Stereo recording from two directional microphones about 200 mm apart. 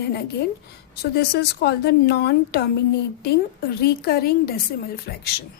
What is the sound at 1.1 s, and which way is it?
A woman's voice, 50° left (ahead or behind).